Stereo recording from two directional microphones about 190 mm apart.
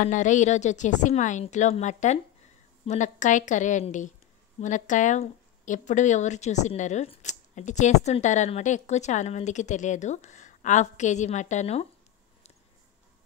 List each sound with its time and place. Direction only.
0.0 s speech: 40° left (ahead or behind)